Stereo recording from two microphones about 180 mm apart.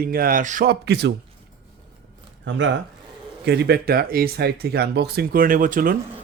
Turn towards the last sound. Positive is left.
turn(degrees=-50)  # may be behind; listen again after turning